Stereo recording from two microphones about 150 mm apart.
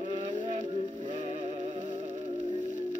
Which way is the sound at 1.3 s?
50° right (ahead or behind).